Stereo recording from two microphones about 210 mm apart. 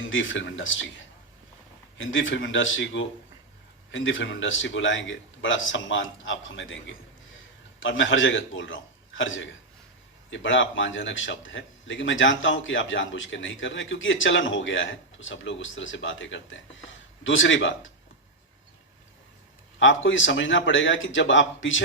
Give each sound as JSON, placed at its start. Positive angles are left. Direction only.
{"t": 0.0, "sound": "a man's voice", "side_deg": 65}
{"t": 2.0, "sound": "a man's voice", "side_deg": 65}
{"t": 19.8, "sound": "a man's voice", "side_deg": 65}